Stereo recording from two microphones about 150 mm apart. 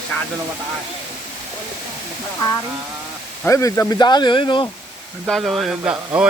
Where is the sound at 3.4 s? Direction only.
20° left (ahead or behind).